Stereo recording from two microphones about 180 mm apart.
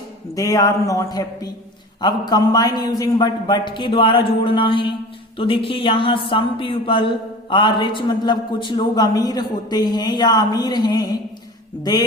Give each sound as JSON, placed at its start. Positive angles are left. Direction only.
{"t": 0.3, "sound": "speech", "side_deg": 20}